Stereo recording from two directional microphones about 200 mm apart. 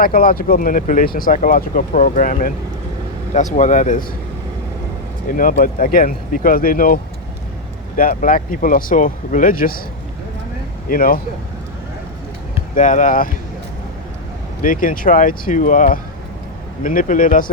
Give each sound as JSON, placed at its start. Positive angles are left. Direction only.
{"t": 0.0, "sound": "speech", "side_deg": 45}
{"t": 5.4, "sound": "speech", "side_deg": 45}
{"t": 10.8, "sound": "speech", "side_deg": 45}
{"t": 12.7, "sound": "speech", "side_deg": 40}
{"t": 14.6, "sound": "speech", "side_deg": 45}